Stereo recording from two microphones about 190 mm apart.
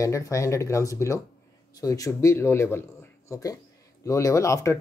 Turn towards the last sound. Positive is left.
turn(degrees=15)  # may be behind; listen again after turning